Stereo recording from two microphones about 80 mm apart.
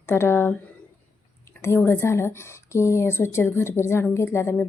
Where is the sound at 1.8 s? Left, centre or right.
Left.